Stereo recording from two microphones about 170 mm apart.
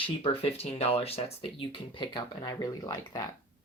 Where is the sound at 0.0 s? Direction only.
35° left (ahead or behind).